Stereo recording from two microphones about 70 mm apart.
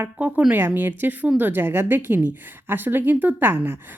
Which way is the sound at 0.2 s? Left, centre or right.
Centre.